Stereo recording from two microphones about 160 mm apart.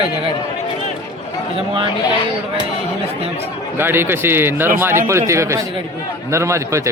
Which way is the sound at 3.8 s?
15° right (ahead or behind).